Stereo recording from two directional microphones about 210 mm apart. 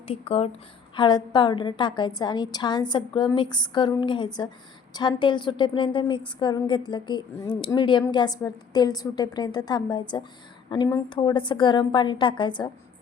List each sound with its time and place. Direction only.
0.1 s a woman's voice: 30° left (ahead or behind)